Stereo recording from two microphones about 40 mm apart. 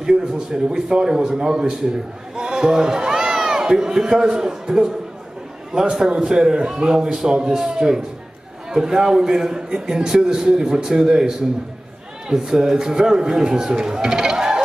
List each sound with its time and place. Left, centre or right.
0.0 s a man's voice: centre